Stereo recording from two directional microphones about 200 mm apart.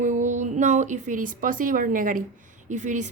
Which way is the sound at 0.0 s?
40° right (ahead or behind).